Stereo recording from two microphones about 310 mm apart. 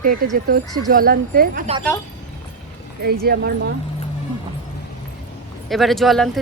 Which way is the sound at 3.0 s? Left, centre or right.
Right.